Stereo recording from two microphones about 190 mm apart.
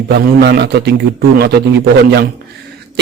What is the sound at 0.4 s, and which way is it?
A woman's voice, 60° right (ahead or behind).